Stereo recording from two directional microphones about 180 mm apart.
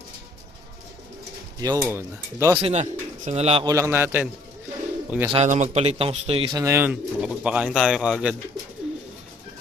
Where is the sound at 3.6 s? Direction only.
15° right (ahead or behind).